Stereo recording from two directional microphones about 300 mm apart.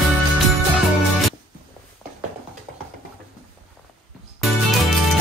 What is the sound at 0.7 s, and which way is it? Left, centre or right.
Music, centre.